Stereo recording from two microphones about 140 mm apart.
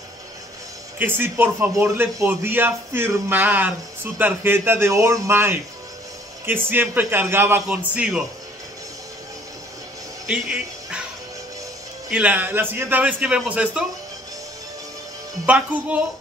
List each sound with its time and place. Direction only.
0.9 s a man's voice: 15° right (ahead or behind)
10.2 s a man's voice: 5° right (ahead or behind)
12.1 s a man's voice: 10° right (ahead or behind)
15.4 s a man's voice: 10° right (ahead or behind)